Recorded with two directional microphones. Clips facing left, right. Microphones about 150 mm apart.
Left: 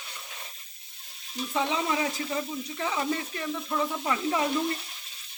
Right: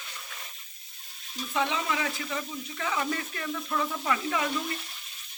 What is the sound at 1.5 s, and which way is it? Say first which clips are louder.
Speech: left 1 dB; 30° left (ahead or behind).